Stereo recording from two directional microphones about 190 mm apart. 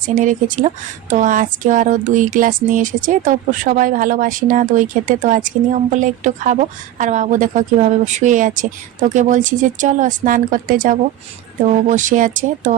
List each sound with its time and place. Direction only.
0.0 s speech: 45° right (ahead or behind)